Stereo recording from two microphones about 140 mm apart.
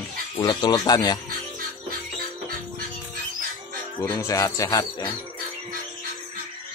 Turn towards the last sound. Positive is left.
turn(degrees=25)  # may be behind; listen again after turning